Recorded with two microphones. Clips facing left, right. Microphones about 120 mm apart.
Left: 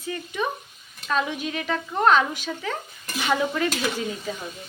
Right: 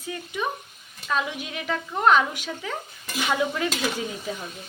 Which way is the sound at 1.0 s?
10° right (ahead or behind).